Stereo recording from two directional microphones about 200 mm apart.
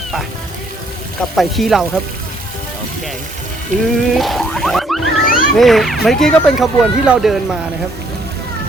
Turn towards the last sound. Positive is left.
turn(degrees=-5)  # may be behind; listen again after turning